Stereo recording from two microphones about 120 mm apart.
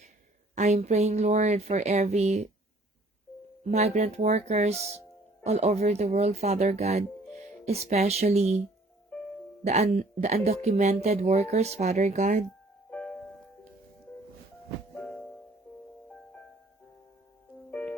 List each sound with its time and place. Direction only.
0.5 s speech: 75° right (ahead or behind)
3.6 s speech: 65° right (ahead or behind)
9.6 s speech: 65° right (ahead or behind); by 12.5 s 85° right
17.7 s music: 15° left (ahead or behind)